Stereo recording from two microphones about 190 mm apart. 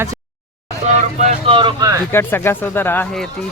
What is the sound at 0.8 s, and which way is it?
Speech, 40° right (ahead or behind).